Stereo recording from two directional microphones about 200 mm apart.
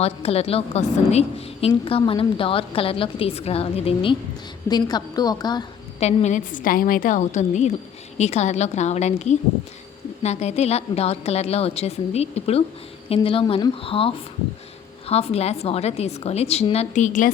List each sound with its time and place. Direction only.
0.0 s a woman's voice: 30° left (ahead or behind)
6.0 s a woman's voice: 35° left (ahead or behind)